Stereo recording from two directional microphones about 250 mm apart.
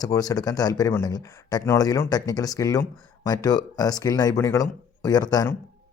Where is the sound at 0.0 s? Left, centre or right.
Centre.